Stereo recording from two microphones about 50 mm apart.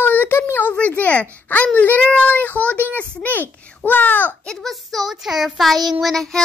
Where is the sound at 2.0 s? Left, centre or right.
Left.